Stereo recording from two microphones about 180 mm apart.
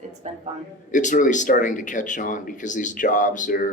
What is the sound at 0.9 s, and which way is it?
Speech, 45° left (ahead or behind).